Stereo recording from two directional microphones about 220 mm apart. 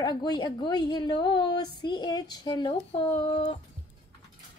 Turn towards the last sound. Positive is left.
turn(degrees=25)  # may be behind; listen again after turning